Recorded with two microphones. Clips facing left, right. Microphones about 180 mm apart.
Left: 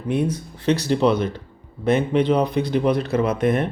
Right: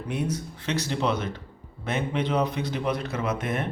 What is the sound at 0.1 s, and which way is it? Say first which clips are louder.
Speech: left 7 dB; 30° left (ahead or behind).